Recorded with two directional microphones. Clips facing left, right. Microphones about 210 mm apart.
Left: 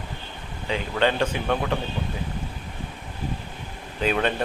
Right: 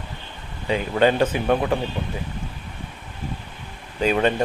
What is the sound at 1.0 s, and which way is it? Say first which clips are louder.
Speech: right 5 dB; 15° right (ahead or behind).